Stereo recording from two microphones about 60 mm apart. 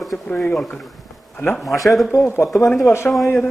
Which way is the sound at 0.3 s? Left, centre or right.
Left.